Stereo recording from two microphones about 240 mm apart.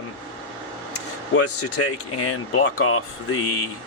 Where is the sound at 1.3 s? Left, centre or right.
Left.